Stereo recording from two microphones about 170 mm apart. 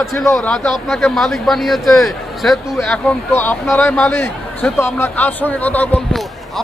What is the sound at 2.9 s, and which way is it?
A man's voice, 10° left (ahead or behind).